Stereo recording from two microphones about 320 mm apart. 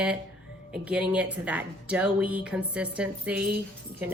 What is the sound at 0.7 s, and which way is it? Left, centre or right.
A woman's voice, centre.